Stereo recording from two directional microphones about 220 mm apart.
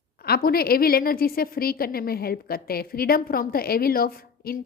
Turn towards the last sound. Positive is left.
turn(degrees=40)  # may be behind; listen again after turning